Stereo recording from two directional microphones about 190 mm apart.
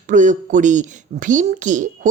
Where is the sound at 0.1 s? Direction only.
40° right (ahead or behind).